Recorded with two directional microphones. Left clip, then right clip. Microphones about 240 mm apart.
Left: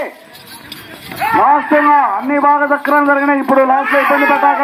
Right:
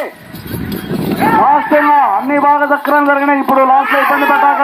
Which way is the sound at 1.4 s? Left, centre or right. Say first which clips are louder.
Left 1 dB; right.